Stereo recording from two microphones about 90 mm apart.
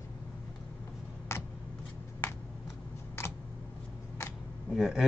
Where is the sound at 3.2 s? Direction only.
30° left (ahead or behind).